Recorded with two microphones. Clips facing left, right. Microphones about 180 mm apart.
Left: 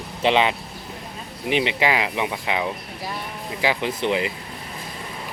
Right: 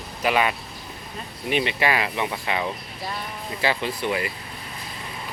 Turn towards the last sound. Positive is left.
turn(degrees=20)  # may be behind; listen again after turning